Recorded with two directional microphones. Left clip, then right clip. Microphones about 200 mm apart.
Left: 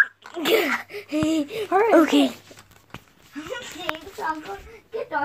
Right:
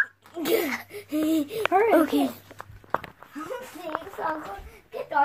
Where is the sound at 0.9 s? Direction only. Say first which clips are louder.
Left 2 dB; 10° left (ahead or behind).